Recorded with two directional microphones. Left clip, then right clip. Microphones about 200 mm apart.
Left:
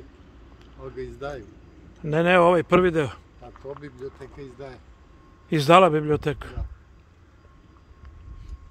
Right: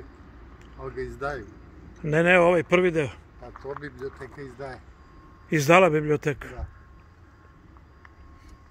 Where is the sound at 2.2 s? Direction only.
20° left (ahead or behind).